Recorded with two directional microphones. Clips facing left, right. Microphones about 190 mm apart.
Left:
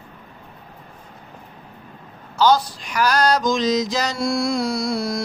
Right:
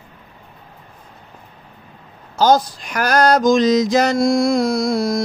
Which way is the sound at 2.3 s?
45° right (ahead or behind).